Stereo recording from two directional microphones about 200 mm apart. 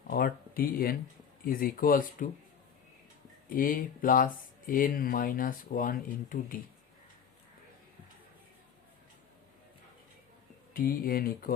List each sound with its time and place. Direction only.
0.1 s speech: 45° left (ahead or behind)
3.5 s speech: 45° left (ahead or behind)
10.8 s speech: 45° left (ahead or behind)